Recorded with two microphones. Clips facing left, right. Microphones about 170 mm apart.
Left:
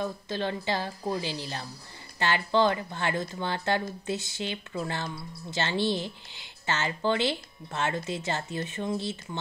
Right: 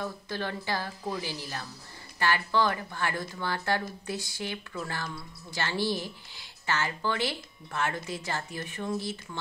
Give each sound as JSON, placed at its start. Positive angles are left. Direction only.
{"t": 0.0, "sound": "speech", "side_deg": 20}